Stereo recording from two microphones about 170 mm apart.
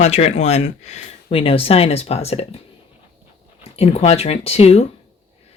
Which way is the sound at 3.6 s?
35° left (ahead or behind).